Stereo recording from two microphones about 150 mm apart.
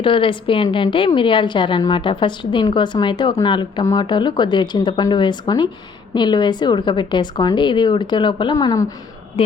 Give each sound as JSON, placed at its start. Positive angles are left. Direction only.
{"t": 0.0, "sound": "a woman's voice", "side_deg": 35}